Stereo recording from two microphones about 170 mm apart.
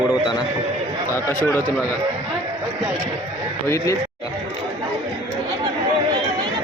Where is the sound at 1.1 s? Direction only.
10° left (ahead or behind).